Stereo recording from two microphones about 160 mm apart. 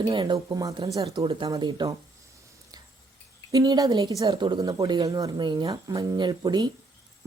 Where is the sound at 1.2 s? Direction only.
35° right (ahead or behind).